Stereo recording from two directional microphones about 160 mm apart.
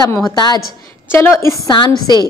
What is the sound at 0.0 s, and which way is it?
A woman's voice, 25° left (ahead or behind).